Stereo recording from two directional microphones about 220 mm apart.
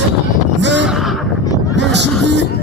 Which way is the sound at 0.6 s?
55° right (ahead or behind).